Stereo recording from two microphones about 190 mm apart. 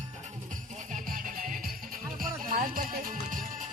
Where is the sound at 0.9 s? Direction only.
45° right (ahead or behind).